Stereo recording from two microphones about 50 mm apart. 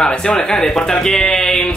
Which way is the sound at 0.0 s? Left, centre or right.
Centre.